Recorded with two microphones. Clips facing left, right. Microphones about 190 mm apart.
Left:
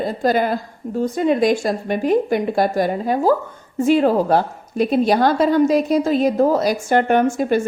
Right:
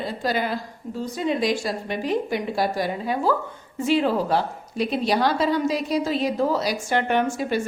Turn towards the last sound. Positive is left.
turn(degrees=50)  # may be behind; listen again after turning